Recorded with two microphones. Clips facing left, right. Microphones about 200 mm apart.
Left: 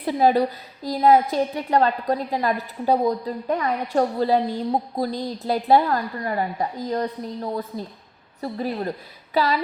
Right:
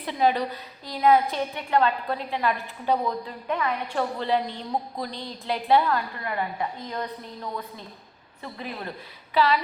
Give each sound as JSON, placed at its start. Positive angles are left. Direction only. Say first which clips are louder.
{"t": 0.0, "sound": "a woman's voice", "louder": "left 5 dB", "side_deg": 40}